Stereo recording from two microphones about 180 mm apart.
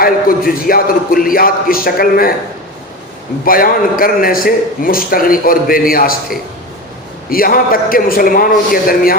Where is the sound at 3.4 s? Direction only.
55° left (ahead or behind).